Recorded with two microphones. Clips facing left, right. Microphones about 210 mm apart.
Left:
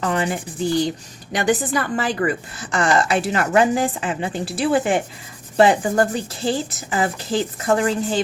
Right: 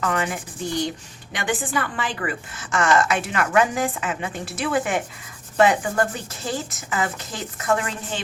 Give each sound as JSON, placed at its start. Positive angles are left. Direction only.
{"t": 0.0, "sound": "a woman's voice", "side_deg": 30}